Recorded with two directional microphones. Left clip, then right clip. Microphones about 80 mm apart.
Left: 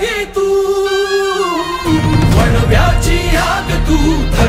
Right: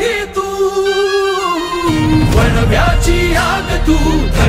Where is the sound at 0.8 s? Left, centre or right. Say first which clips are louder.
Right 1 dB; left.